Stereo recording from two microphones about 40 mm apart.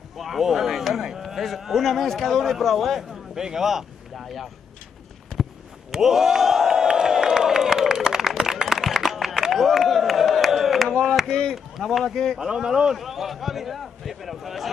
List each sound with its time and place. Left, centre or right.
0.2 s speech: centre
3.0 s speech: centre
5.9 s crowd: centre
8.0 s a sound: centre
8.3 s a sound: centre
11.5 s speech: centre
12.4 s speech: centre
12.9 s speech: centre